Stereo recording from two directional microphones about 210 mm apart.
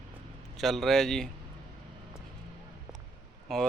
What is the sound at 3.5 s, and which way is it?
Speech, centre (ahead or behind).